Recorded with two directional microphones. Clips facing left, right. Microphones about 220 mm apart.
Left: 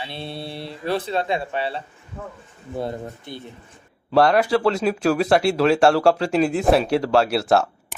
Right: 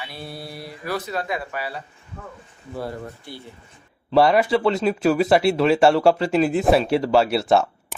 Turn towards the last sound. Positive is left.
turn(degrees=0)  # may be behind; listen again after turning